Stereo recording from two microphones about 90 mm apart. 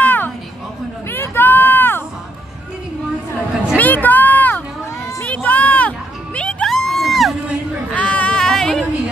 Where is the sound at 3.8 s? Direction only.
20° left (ahead or behind).